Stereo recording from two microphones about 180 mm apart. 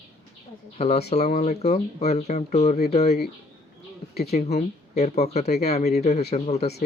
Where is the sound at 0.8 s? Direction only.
40° left (ahead or behind).